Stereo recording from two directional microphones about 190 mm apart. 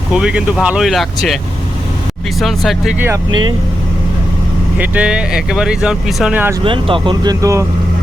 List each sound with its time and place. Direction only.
0.1 s speech: 5° right (ahead or behind)
2.6 s speech: centre (ahead or behind)
4.8 s speech: 5° right (ahead or behind)
6.7 s speech: 25° right (ahead or behind)